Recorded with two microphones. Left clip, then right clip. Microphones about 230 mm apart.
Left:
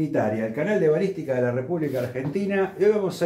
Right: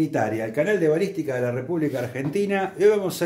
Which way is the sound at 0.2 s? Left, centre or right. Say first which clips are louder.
Right 1 dB; right.